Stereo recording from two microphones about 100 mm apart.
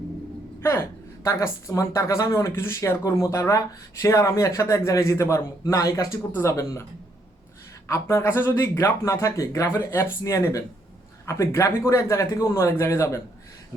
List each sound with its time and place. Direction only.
0.6 s a woman's voice: 30° left (ahead or behind)
7.9 s a man's voice: 30° left (ahead or behind)